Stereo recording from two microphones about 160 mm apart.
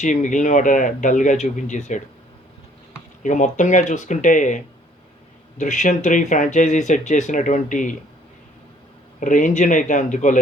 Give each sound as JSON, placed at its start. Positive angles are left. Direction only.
{"t": 0.0, "sound": "speech", "side_deg": 50}
{"t": 3.2, "sound": "speech", "side_deg": 50}
{"t": 9.2, "sound": "speech", "side_deg": 55}